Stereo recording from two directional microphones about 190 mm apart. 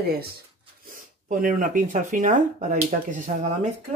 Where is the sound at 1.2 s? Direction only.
45° right (ahead or behind).